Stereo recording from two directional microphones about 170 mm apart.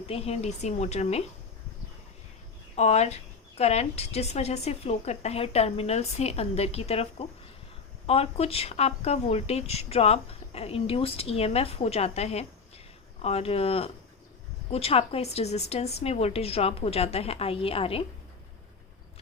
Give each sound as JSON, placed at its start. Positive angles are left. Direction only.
{"t": 0.1, "sound": "speech", "side_deg": 35}
{"t": 2.7, "sound": "speech", "side_deg": 40}